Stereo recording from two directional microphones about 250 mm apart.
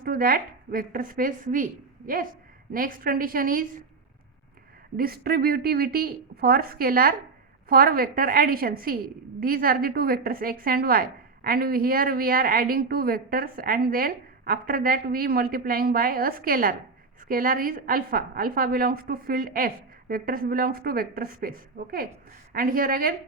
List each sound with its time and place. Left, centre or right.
0.0 s speech: right
4.9 s speech: right